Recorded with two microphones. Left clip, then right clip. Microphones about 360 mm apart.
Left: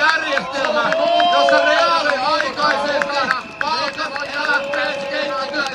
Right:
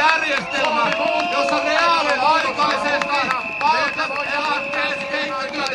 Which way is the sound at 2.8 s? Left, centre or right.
Centre.